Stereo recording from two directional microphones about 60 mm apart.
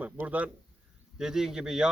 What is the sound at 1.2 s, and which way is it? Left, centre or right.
Speech, centre.